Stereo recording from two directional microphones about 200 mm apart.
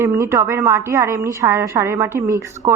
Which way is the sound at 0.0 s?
15° right (ahead or behind).